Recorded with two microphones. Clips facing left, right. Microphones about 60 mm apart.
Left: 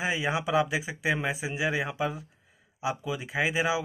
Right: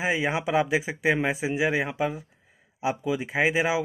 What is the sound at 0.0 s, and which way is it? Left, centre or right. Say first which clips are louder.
Speech: right 3 dB; right.